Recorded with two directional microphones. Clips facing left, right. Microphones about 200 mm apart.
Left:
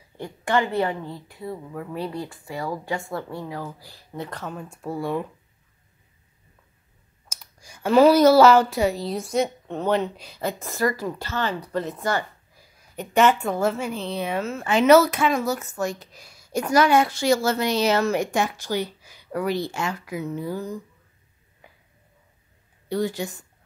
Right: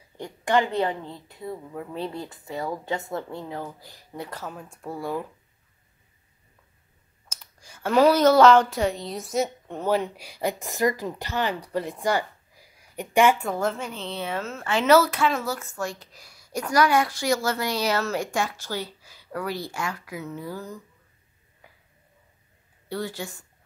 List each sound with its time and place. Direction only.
0.2 s a woman's voice: 15° right (ahead or behind); by 5.2 s centre (ahead or behind)
7.2 s speech: 10° left (ahead or behind); by 13.4 s 10° right (ahead or behind)
13.4 s a woman's voice: 5° left (ahead or behind); by 20.6 s 20° left (ahead or behind)
22.8 s a woman's voice: 15° left (ahead or behind)